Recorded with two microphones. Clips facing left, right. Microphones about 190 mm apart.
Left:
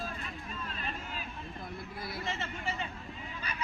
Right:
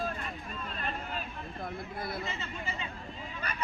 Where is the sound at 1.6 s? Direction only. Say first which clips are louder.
Right 5 dB; 55° right (ahead or behind).